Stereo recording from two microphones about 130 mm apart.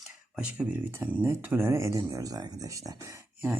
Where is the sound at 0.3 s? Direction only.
10° right (ahead or behind).